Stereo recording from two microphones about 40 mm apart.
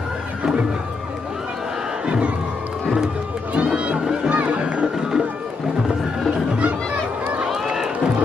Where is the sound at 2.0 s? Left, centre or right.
Right.